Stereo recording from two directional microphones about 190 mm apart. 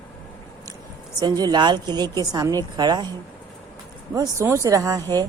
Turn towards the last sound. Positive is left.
turn(degrees=-20)  # may be behind; listen again after turning